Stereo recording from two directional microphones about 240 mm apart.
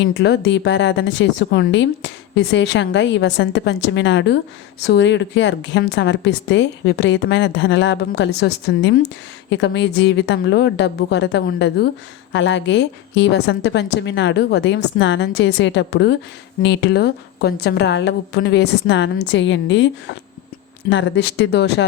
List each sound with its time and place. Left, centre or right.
0.0 s speech: left